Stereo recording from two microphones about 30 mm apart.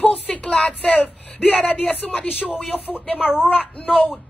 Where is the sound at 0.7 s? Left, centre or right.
Left.